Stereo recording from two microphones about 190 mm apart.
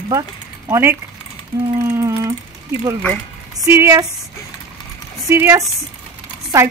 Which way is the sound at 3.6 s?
15° right (ahead or behind).